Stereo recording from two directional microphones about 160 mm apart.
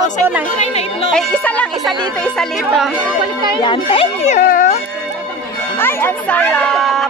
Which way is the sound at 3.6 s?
35° left (ahead or behind).